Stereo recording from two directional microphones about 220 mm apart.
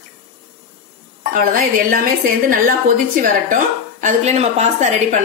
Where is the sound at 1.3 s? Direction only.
40° right (ahead or behind).